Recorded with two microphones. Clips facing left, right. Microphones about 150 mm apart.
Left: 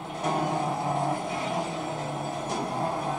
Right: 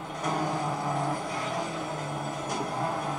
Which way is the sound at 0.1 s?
25° left (ahead or behind).